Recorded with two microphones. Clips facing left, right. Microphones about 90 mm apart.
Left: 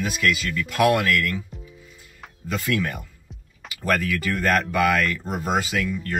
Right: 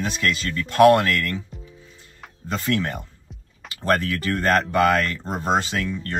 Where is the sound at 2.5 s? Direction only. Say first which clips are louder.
Right 1 dB; 30° right (ahead or behind).